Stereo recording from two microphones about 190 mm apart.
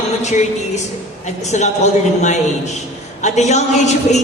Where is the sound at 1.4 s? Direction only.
35° left (ahead or behind).